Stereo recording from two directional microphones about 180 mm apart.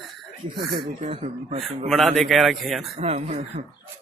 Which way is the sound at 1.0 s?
35° right (ahead or behind).